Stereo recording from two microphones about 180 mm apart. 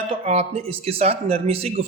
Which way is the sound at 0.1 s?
35° right (ahead or behind).